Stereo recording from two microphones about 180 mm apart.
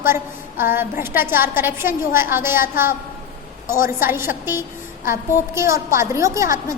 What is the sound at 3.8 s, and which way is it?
A woman's voice, 15° right (ahead or behind).